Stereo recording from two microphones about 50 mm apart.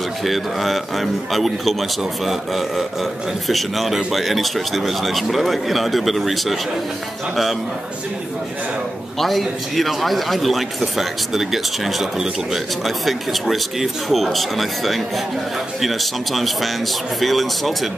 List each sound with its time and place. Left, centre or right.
0.2 s a man's voice: centre
9.2 s a man's voice: centre